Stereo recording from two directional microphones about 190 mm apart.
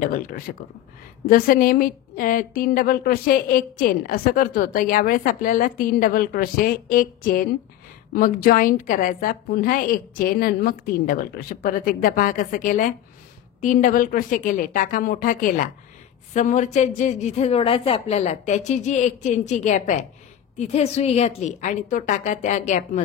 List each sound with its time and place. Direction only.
0.0 s a woman's voice: 45° left (ahead or behind)